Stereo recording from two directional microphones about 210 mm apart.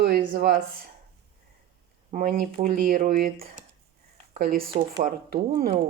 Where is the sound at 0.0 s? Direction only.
45° right (ahead or behind).